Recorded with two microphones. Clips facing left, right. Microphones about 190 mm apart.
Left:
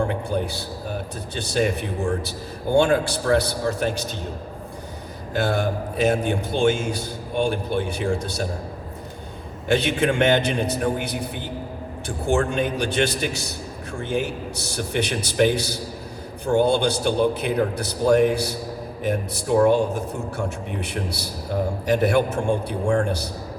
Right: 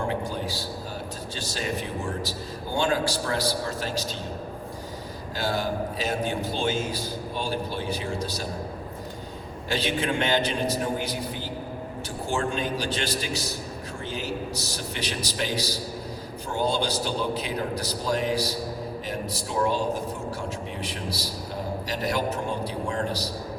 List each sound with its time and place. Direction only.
0.1 s a sound: 60° left (ahead or behind)
1.5 s a man's voice: 55° left (ahead or behind)
5.3 s a man's voice: 60° left (ahead or behind)
9.6 s a man's voice: 55° left (ahead or behind)
12.3 s a man's voice: 60° left (ahead or behind)
21.5 s a man's voice: 60° left (ahead or behind)